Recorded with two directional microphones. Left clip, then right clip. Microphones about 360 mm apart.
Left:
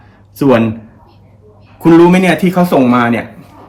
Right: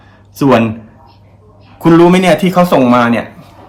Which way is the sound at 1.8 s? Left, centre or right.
Centre.